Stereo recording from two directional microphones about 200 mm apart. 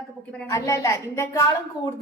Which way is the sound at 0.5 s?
15° left (ahead or behind).